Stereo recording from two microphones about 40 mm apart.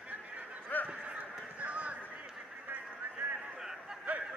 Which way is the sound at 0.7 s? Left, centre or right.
Left.